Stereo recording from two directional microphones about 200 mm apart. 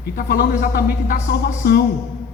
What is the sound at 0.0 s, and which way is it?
A man's voice, 50° left (ahead or behind).